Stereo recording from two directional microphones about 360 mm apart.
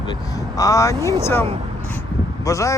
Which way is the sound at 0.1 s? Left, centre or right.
Centre.